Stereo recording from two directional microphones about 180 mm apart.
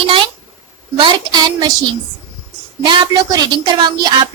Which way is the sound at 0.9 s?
25° right (ahead or behind).